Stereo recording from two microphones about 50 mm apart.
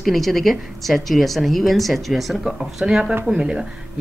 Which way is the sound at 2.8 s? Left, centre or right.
Centre.